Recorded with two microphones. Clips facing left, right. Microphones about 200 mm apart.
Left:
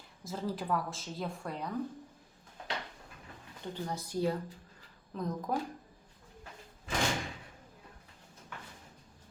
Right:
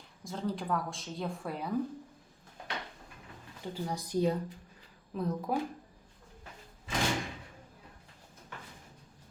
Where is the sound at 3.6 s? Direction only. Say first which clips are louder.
Right 1 dB; 10° right (ahead or behind).